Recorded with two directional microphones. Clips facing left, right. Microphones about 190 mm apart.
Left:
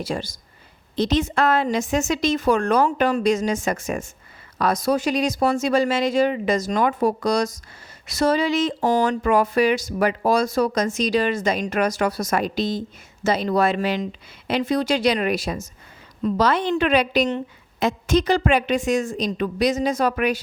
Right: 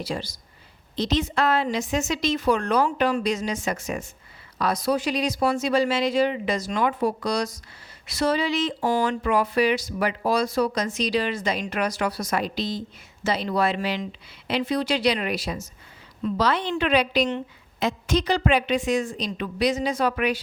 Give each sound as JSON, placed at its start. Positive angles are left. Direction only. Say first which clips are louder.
{"t": 0.0, "sound": "speech", "louder": "left 3 dB", "side_deg": 50}